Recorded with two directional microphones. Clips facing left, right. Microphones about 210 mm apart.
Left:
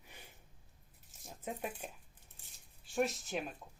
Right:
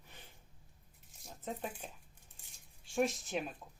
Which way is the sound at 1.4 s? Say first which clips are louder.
Even; 10° left (ahead or behind).